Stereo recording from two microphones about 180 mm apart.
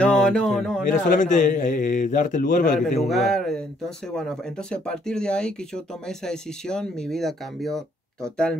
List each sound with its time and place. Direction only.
0.0 s speech: 5° left (ahead or behind)
1.0 s a man's voice: 45° left (ahead or behind)
3.1 s speech: centre (ahead or behind)